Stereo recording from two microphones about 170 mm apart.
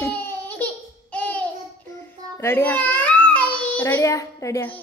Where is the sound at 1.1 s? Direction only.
10° left (ahead or behind).